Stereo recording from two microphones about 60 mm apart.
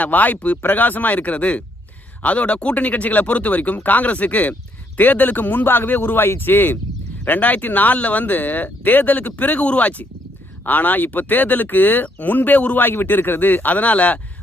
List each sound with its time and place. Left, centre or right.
0.0 s speech: left